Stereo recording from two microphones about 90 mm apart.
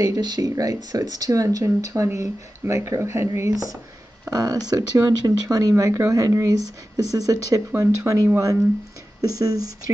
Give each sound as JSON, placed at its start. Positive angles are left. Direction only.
{"t": 0.0, "sound": "speech", "side_deg": -50}
{"t": 4.3, "sound": "speech", "side_deg": -45}
{"t": 7.7, "sound": "speech", "side_deg": -30}
{"t": 9.4, "sound": "speech", "side_deg": -45}